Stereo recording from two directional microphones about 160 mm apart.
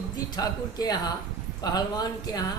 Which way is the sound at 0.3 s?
25° left (ahead or behind).